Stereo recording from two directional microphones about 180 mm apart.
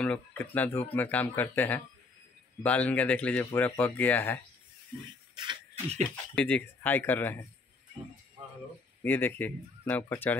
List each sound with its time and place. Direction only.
0.0 s speech: 10° left (ahead or behind)
5.3 s a sound: 25° right (ahead or behind)
6.0 s speech: 10° left (ahead or behind)
9.0 s speech: 10° left (ahead or behind)